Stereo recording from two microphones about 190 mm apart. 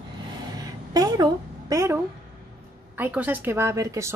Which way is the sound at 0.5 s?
20° right (ahead or behind).